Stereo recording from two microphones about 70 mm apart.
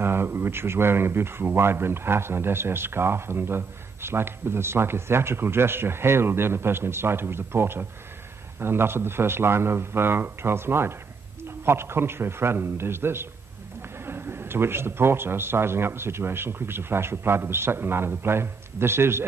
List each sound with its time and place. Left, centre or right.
0.0 s speech: right